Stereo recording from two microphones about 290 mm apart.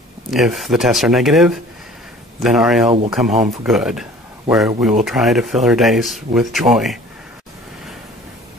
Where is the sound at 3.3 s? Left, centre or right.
Right.